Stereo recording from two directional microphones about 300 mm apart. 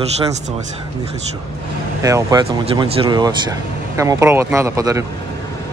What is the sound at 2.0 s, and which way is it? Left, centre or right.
Speech, centre.